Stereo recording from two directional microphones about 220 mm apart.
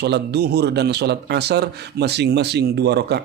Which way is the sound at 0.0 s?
50° right (ahead or behind).